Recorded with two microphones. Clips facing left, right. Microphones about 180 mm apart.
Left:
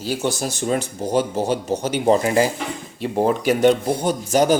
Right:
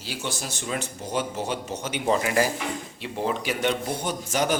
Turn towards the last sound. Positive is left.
turn(degrees=35)  # may be behind; listen again after turning